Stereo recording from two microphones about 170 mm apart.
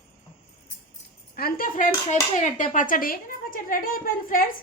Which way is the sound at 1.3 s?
60° left (ahead or behind).